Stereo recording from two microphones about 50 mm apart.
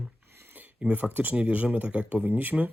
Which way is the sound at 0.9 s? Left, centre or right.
Right.